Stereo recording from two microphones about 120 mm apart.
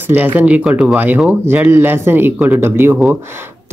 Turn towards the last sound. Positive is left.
turn(degrees=-15)  # may be behind; listen again after turning